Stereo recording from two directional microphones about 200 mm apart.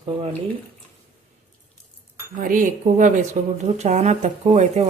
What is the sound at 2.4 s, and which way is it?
Speech, 40° right (ahead or behind).